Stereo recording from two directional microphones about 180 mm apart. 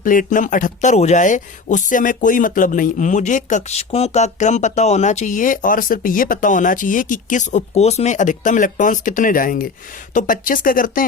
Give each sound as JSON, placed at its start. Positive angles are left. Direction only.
{"t": 0.0, "sound": "speech", "side_deg": 50}